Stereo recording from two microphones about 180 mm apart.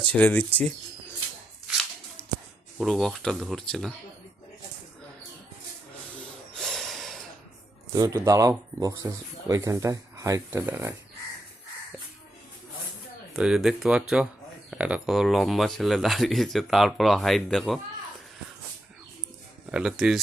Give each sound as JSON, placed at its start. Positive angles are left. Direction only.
{"t": 0.1, "sound": "speech", "side_deg": 10}
{"t": 1.6, "sound": "a sound", "side_deg": 0}
{"t": 2.7, "sound": "speech", "side_deg": 0}
{"t": 6.1, "sound": "snort", "side_deg": 5}
{"t": 7.9, "sound": "speech", "side_deg": -20}
{"t": 13.3, "sound": "speech", "side_deg": 0}
{"t": 19.7, "sound": "speech", "side_deg": 0}